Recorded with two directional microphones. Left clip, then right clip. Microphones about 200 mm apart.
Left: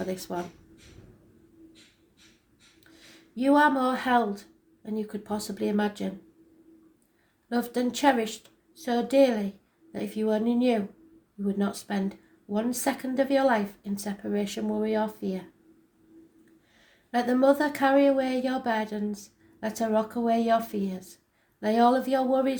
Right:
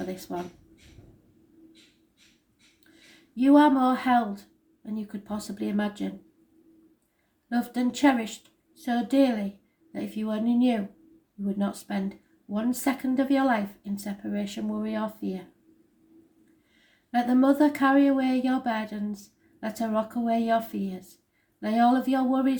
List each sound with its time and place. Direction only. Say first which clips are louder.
0.1 s speech: left 3 dB; 30° left (ahead or behind)
2.9 s speech: even; 25° left (ahead or behind)
7.5 s speech: left 1 dB; 25° left (ahead or behind)
11.6 s speech: even; 25° left (ahead or behind)
17.1 s speech: left 1 dB; 25° left (ahead or behind)